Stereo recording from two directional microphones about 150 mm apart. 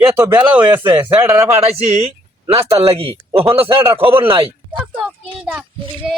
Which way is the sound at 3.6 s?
15° right (ahead or behind).